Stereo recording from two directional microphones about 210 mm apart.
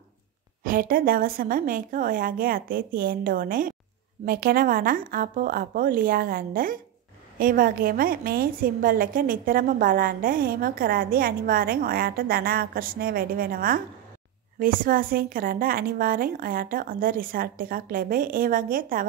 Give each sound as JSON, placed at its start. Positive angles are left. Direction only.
{"t": 0.7, "sound": "a woman's voice", "side_deg": -45}